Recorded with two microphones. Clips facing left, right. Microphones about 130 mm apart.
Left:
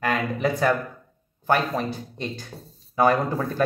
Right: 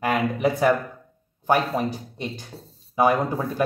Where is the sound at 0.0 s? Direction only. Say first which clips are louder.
Right 2 dB; 15° right (ahead or behind).